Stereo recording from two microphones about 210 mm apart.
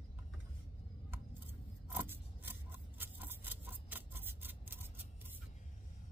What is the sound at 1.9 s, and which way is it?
Scissors, 10° right (ahead or behind).